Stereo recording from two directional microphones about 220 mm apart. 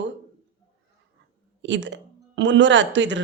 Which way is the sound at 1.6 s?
55° right (ahead or behind).